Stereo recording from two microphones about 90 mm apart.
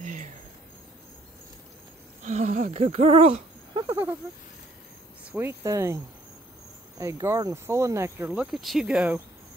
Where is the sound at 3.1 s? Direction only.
90° right.